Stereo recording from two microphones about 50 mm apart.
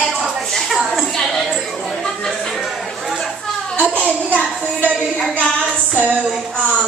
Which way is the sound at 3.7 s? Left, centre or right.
Left.